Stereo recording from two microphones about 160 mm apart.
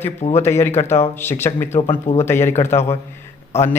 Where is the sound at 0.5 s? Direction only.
15° left (ahead or behind).